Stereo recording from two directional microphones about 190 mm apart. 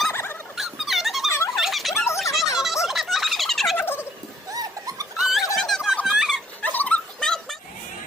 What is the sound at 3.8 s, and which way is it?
Gobble, 10° left (ahead or behind).